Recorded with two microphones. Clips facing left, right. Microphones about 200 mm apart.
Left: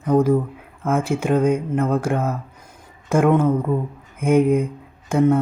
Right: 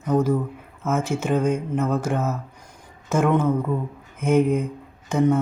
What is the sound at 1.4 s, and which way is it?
Speech, 55° left (ahead or behind).